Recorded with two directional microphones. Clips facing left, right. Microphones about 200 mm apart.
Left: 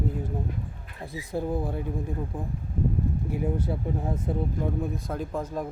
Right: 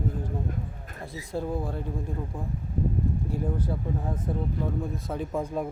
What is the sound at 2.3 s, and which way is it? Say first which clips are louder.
Speech: left 1 dB; 20° left (ahead or behind).